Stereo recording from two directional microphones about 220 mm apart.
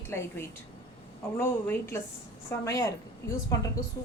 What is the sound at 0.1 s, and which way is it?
A woman's voice, 10° left (ahead or behind).